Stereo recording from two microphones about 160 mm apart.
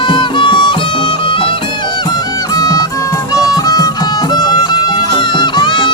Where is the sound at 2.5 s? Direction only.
20° left (ahead or behind).